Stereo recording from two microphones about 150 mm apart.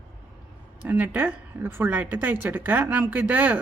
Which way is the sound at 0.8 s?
10° right (ahead or behind).